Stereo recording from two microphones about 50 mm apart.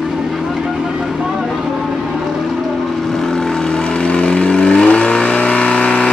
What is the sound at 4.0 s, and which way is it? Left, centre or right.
Vehicle, left.